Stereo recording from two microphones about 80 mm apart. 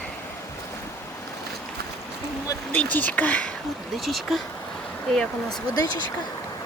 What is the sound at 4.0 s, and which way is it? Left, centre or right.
Speech, centre.